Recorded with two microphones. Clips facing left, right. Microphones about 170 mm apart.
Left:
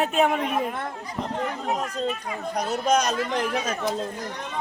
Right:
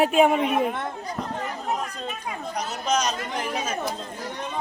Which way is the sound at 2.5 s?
55° left (ahead or behind).